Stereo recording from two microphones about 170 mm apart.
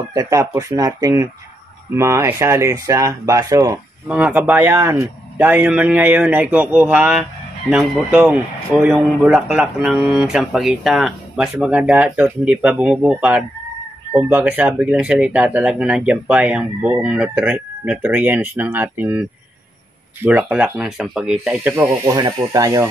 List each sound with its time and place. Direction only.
0.1 s speech: 20° right (ahead or behind)
20.2 s speech: 10° right (ahead or behind)